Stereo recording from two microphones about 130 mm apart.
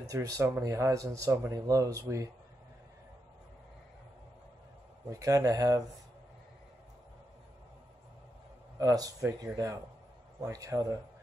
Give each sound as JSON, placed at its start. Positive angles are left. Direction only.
{"t": 0.1, "sound": "speech", "side_deg": -25}
{"t": 5.1, "sound": "speech", "side_deg": -25}
{"t": 8.7, "sound": "speech", "side_deg": -25}